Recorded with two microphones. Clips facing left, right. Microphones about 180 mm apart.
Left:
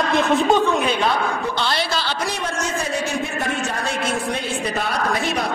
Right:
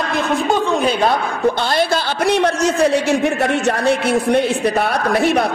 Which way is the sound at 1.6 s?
55° right (ahead or behind).